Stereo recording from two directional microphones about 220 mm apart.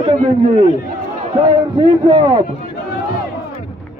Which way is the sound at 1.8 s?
25° right (ahead or behind).